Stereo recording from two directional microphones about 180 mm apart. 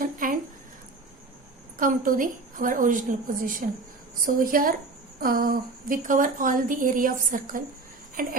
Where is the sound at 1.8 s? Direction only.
50° right (ahead or behind).